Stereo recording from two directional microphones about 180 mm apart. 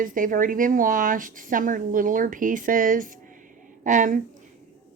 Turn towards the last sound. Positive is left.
turn(degrees=-45)  # may be behind; listen again after turning